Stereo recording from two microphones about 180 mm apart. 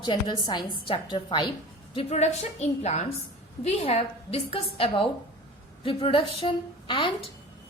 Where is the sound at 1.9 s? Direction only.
35° left (ahead or behind).